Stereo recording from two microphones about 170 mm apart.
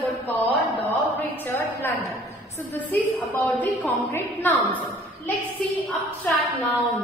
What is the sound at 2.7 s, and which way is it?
A woman's voice, 10° left (ahead or behind).